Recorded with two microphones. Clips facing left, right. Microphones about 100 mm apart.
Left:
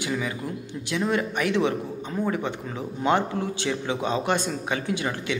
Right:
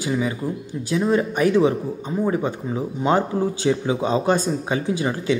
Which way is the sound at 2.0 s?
10° right (ahead or behind).